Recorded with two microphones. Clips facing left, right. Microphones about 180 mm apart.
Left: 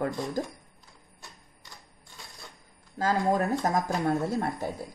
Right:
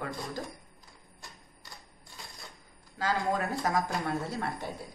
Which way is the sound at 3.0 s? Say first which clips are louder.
Left 5 dB; 45° left (ahead or behind).